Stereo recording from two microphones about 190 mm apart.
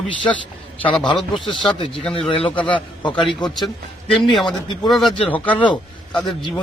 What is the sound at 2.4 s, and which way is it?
A man's voice, 5° left (ahead or behind).